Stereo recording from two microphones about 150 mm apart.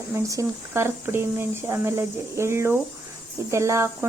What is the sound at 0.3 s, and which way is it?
Speech, 20° right (ahead or behind).